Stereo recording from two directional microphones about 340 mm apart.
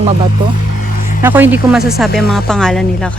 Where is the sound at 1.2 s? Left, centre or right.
Centre.